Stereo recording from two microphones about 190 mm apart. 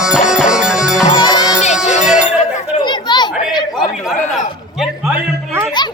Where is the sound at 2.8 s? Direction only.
25° left (ahead or behind).